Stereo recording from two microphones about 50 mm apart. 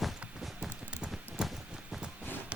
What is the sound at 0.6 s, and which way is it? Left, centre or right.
Clip-clop, right.